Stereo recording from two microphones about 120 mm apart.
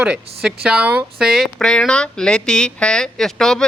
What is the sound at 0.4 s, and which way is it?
Speech, 5° right (ahead or behind).